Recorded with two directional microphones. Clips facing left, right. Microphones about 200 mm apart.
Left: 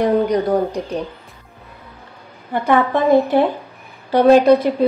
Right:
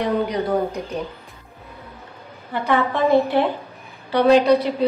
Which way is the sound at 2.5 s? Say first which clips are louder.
Left 4 dB; 50° left (ahead or behind).